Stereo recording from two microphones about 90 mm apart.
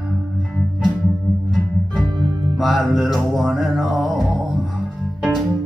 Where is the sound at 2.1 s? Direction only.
55° right (ahead or behind).